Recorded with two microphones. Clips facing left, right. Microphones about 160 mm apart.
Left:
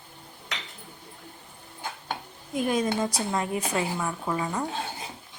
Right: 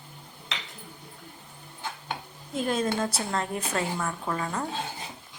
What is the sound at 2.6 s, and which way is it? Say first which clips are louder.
A woman's voice: left 1 dB; 10° left (ahead or behind).